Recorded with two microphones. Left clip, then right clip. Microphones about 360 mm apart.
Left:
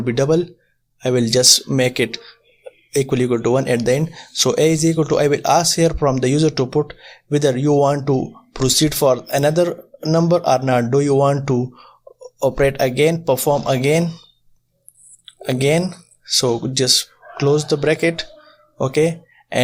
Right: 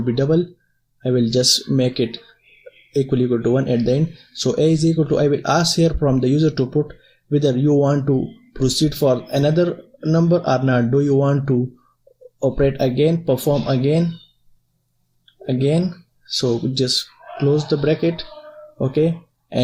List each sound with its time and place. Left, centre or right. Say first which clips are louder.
0.0 s speech: left 2 dB; centre
12.5 s speech: left 2 dB; left
15.4 s speech: left 3 dB; left